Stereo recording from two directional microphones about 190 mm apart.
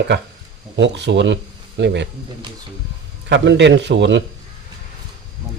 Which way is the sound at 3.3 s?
65° right (ahead or behind).